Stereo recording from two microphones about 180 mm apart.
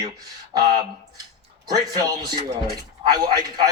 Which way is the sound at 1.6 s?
20° right (ahead or behind).